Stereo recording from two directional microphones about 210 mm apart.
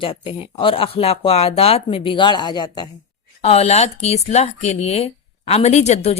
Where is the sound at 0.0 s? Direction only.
25° left (ahead or behind).